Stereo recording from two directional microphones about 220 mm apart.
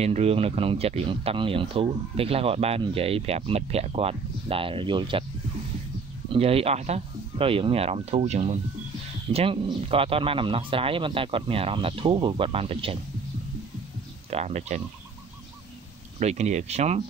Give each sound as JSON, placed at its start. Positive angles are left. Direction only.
{"t": 0.0, "sound": "speech", "side_deg": -30}
{"t": 6.3, "sound": "speech", "side_deg": -25}
{"t": 14.3, "sound": "speech", "side_deg": -30}
{"t": 16.2, "sound": "speech", "side_deg": -30}